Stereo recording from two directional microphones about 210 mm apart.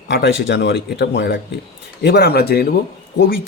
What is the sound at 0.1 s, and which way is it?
Speech, 60° left (ahead or behind).